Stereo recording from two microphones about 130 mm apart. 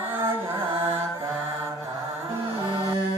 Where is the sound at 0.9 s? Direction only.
50° right (ahead or behind).